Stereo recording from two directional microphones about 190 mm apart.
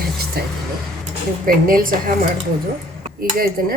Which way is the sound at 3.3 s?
50° right (ahead or behind).